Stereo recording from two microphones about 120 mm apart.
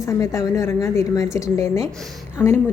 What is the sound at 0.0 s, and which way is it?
A woman's voice, 25° left (ahead or behind).